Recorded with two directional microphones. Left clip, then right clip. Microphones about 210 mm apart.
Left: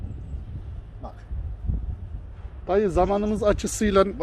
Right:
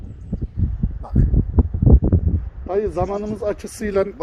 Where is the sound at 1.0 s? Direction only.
25° right (ahead or behind).